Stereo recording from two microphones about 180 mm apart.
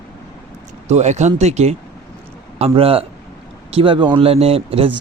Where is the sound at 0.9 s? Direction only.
40° right (ahead or behind).